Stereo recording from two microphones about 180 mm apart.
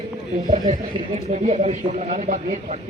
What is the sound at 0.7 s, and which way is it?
Speech, 40° right (ahead or behind).